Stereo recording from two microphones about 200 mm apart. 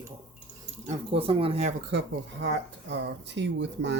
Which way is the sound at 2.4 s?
60° right (ahead or behind).